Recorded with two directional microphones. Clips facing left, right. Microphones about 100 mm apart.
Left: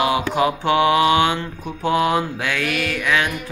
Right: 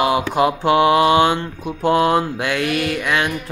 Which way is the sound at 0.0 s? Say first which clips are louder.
Right 2 dB; 20° right (ahead or behind).